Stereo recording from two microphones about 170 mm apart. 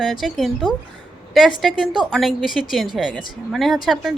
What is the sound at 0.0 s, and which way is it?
Speech, centre (ahead or behind).